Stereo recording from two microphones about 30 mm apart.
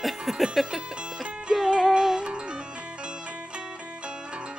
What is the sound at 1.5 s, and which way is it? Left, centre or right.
Speech, centre.